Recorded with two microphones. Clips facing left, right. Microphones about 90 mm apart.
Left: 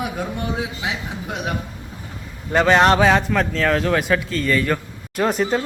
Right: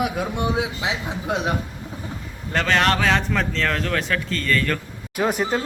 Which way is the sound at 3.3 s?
5° left (ahead or behind).